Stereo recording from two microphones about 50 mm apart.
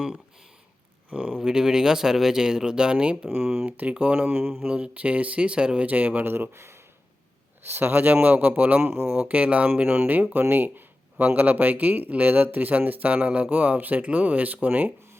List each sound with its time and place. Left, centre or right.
1.5 s speech: centre
3.2 s speech: right
4.3 s speech: right
4.7 s speech: right
5.9 s speech: right
6.2 s speech: right
7.6 s speech: right
8.8 s speech: right
9.1 s speech: right
9.8 s speech: right
10.5 s a sound: right
11.3 s speech: right